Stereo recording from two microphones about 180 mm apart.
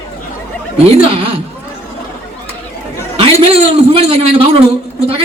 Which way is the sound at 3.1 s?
35° right (ahead or behind).